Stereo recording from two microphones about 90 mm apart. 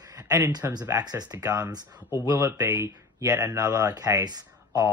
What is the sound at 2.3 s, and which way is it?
Speech, 30° right (ahead or behind).